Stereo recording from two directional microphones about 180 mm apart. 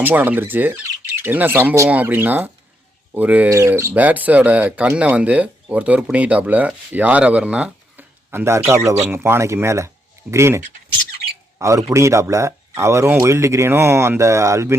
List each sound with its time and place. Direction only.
0.0 s speech: 10° right (ahead or behind)
11.6 s speech: 20° right (ahead or behind)